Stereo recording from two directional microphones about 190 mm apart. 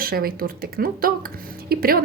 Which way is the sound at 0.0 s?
50° right (ahead or behind).